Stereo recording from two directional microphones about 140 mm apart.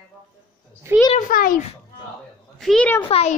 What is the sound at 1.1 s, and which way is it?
Speech, 90° left.